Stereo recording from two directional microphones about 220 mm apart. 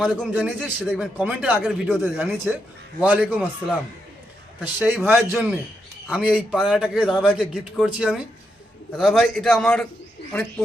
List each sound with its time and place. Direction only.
0.0 s a man's voice: centre (ahead or behind)